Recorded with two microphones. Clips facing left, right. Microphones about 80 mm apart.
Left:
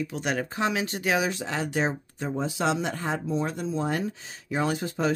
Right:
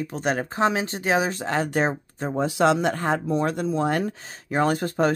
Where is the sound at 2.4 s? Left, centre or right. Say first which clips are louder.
Right 7 dB; right.